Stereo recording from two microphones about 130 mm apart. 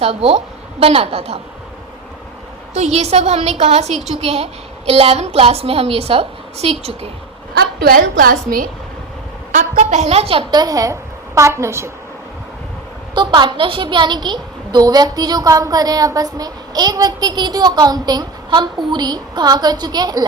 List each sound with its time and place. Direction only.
0.0 s a woman's voice: 50° right (ahead or behind)
2.7 s a woman's voice: 60° right (ahead or behind)
7.9 s a woman's voice: 90° right
9.5 s a woman's voice: 70° right (ahead or behind); by 10.4 s 50° right (ahead or behind)
10.5 s a woman's voice: 30° right (ahead or behind)
13.1 s a woman's voice: 35° right (ahead or behind)